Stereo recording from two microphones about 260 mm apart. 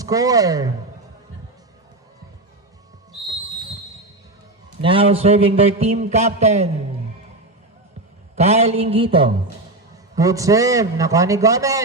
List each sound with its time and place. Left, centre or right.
0.0 s a man's voice: centre
4.8 s a man's voice: right
8.4 s a man's voice: right